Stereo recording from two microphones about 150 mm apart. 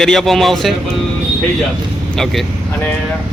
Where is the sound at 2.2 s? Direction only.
5° left (ahead or behind).